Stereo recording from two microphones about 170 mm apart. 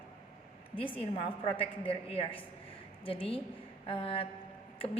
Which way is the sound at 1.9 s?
35° left (ahead or behind).